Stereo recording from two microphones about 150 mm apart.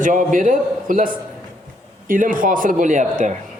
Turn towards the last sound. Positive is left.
turn(degrees=-55)  # may be behind; listen again after turning